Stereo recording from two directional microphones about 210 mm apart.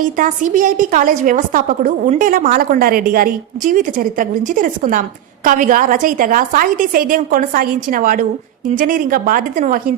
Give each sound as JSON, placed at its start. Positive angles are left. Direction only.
{"t": 0.0, "sound": "a woman's voice", "side_deg": -40}